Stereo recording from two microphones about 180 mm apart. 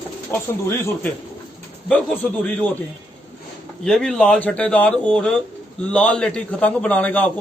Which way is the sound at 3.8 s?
5° left (ahead or behind).